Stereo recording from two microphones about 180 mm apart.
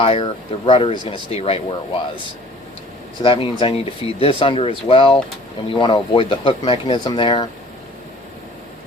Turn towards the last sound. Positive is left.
turn(degrees=25)  # may be behind; listen again after turning